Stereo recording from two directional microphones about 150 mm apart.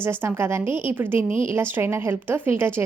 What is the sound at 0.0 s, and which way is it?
A woman's voice, 15° right (ahead or behind).